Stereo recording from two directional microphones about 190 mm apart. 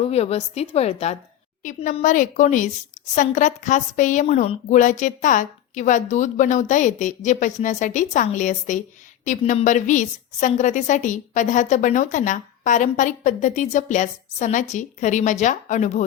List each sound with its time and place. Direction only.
0.1 s a woman's voice: 35° left (ahead or behind)